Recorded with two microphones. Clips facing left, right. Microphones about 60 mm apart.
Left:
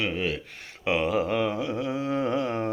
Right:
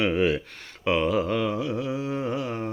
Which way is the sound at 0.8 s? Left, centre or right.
Centre.